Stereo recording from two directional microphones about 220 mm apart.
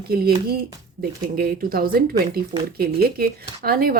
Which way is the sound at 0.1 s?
45° right (ahead or behind).